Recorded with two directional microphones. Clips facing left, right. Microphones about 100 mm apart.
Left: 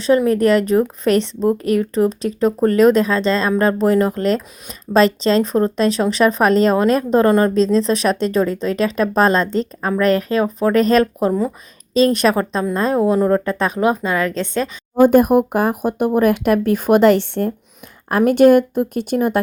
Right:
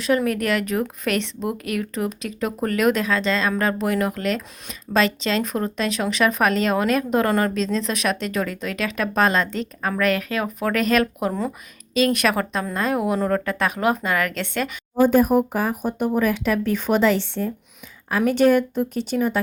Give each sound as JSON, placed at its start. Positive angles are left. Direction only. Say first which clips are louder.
{"t": 0.3, "sound": "speech", "louder": "left 8 dB", "side_deg": 35}
{"t": 11.3, "sound": "speech", "louder": "left 6 dB", "side_deg": 10}
{"t": 11.9, "sound": "a woman's voice", "louder": "left 5 dB", "side_deg": 30}
{"t": 14.9, "sound": "speech", "louder": "left 5 dB", "side_deg": 55}
{"t": 18.3, "sound": "speech", "louder": "left 6 dB", "side_deg": 50}